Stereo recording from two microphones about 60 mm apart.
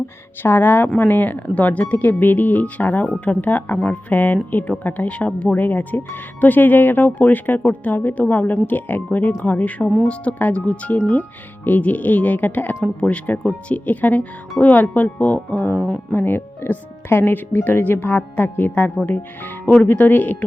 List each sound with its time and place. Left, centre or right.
0.4 s speech: left
12.8 s speech: centre
16.1 s speech: left